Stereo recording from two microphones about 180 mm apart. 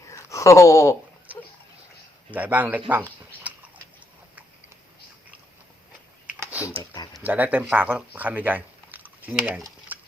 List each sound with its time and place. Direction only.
0.1 s a sound: 15° left (ahead or behind)
2.3 s a man's voice: 10° right (ahead or behind)
6.4 s computer keyboard: 10° right (ahead or behind)
7.1 s speech: 10° right (ahead or behind)